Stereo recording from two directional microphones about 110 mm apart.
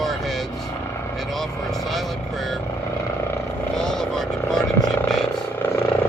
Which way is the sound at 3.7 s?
5° left (ahead or behind).